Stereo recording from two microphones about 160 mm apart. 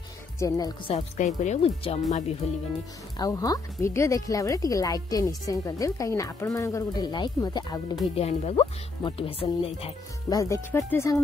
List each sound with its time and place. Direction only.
0.4 s speech: 25° left (ahead or behind)
1.1 s speech: 45° left (ahead or behind)
3.2 s speech: 20° left (ahead or behind)
8.1 s speech: 40° left (ahead or behind)
10.3 s speech: 20° left (ahead or behind)